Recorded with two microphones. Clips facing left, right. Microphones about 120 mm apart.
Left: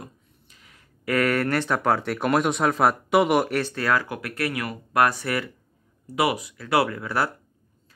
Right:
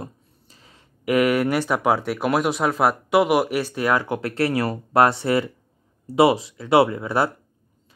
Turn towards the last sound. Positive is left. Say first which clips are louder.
# right 5 dB
turn(degrees=-25)  # may be behind; listen again after turning